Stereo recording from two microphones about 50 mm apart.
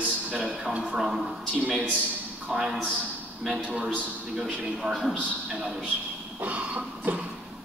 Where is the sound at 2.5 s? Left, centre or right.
Centre.